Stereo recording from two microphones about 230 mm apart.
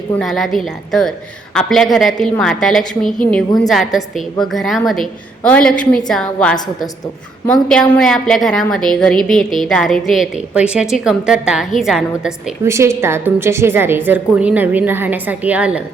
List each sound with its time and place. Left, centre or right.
0.2 s a woman's voice: centre